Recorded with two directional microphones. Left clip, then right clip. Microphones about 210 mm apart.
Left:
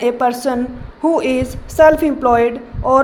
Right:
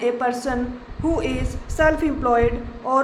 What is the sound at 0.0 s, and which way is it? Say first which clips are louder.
A woman's voice: left 6 dB; 25° left (ahead or behind).